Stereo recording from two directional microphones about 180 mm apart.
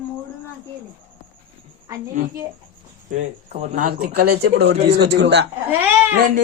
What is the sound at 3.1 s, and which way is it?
Speech, 40° right (ahead or behind).